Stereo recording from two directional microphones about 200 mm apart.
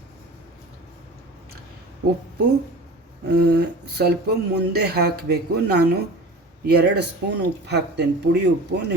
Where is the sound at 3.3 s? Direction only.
50° right (ahead or behind).